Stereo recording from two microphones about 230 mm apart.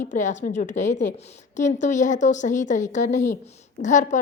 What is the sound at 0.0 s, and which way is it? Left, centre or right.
A woman's voice, left.